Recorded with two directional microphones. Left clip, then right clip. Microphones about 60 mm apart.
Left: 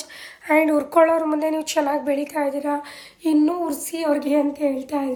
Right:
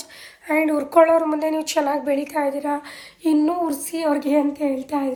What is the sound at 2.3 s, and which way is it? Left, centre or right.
A woman's voice, left.